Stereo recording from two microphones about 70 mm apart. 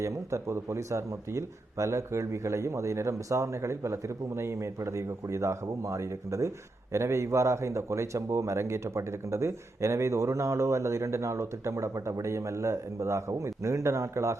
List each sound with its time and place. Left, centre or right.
0.0 s speech: right